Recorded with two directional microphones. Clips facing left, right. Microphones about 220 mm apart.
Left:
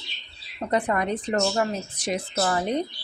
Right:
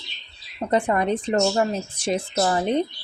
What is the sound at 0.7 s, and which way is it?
A woman's voice, 25° right (ahead or behind).